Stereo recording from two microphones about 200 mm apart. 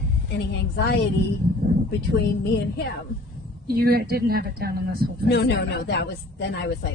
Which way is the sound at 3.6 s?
50° right (ahead or behind).